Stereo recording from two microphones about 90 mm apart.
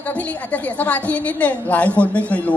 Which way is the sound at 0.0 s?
15° left (ahead or behind).